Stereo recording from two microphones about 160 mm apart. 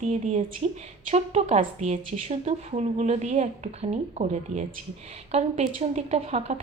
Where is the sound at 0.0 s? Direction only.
45° right (ahead or behind).